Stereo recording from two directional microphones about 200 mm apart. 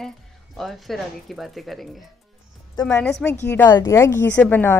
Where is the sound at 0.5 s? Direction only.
Centre (ahead or behind).